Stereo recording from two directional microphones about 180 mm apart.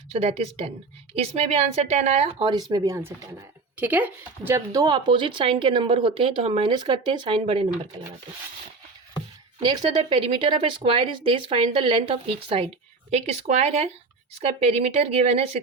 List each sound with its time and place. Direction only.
0.1 s speech: 35° right (ahead or behind)
9.6 s speech: 25° right (ahead or behind)